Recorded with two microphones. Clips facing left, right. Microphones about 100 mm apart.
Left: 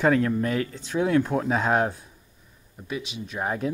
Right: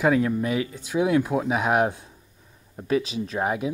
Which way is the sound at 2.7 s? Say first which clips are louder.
Right 9 dB; 35° right (ahead or behind).